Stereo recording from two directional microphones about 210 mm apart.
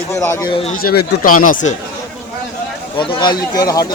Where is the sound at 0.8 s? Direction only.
45° left (ahead or behind).